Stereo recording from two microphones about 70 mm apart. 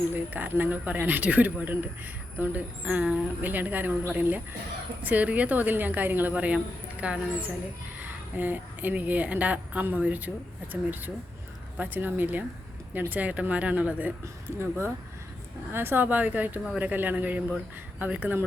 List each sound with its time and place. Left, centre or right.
0.1 s speech: right
14.6 s speech: right